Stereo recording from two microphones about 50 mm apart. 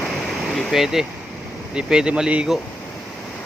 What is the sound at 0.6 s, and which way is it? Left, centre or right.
Speech, centre.